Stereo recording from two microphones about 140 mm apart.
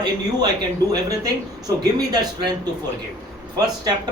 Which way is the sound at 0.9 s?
25° right (ahead or behind).